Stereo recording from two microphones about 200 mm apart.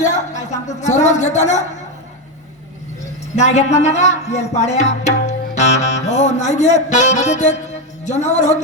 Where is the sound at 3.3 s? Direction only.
35° left (ahead or behind).